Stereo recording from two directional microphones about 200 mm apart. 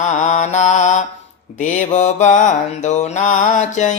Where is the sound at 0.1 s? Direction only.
35° left (ahead or behind).